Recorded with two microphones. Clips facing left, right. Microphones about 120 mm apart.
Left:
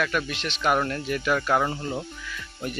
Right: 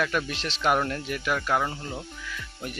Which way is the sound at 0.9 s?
10° right (ahead or behind).